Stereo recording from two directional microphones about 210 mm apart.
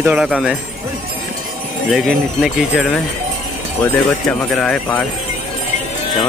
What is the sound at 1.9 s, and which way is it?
Speech, centre (ahead or behind).